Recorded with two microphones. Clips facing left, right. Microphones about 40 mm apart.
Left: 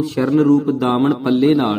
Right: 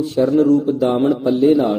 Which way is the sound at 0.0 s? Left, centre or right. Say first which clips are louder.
Right 1 dB; left.